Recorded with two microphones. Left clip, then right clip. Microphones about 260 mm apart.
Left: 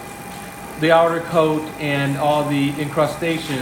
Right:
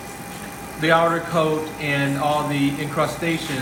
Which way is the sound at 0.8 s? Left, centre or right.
Left.